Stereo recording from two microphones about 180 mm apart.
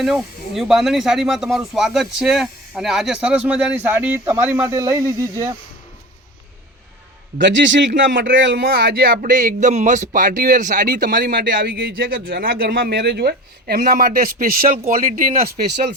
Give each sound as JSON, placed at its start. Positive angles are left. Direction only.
{"t": 0.0, "sound": "speech", "side_deg": 0}
{"t": 7.3, "sound": "a man's voice", "side_deg": -90}
{"t": 15.7, "sound": "speech", "side_deg": -70}